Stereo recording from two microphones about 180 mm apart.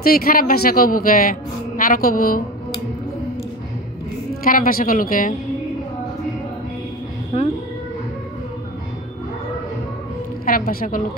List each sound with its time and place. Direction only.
0.0 s a man's voice: 55° left (ahead or behind)
4.5 s a man's voice: 50° left (ahead or behind)
10.4 s a man's voice: 55° left (ahead or behind)